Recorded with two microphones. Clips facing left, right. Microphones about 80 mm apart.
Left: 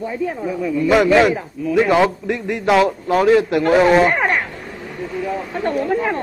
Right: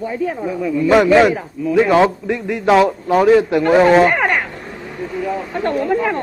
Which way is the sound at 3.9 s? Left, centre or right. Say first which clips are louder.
Right 2 dB; centre.